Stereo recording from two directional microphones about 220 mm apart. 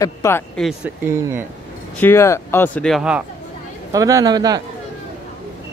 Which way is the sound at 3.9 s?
15° right (ahead or behind).